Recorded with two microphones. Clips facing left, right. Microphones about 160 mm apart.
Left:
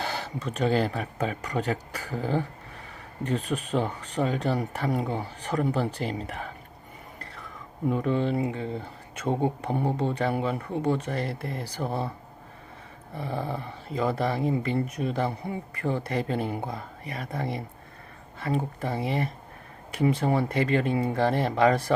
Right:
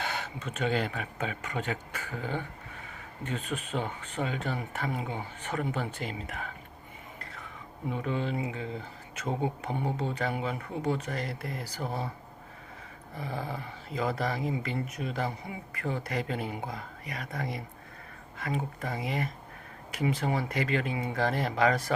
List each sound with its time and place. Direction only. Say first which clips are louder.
0.0 s speech: left 4 dB; 35° left (ahead or behind)
7.2 s a sound: left 3 dB; 40° left (ahead or behind)
9.2 s speech: left 5 dB; 35° left (ahead or behind)
11.8 s speech: left 5 dB; 60° left (ahead or behind)
13.1 s speech: left 4 dB; 30° left (ahead or behind)